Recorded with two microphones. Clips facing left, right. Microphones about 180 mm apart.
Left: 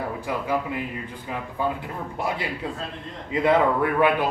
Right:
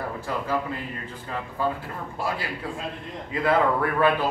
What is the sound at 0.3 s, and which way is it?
Speech, 15° left (ahead or behind).